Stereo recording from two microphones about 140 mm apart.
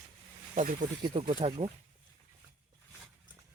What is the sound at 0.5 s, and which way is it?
Speech, 65° right (ahead or behind).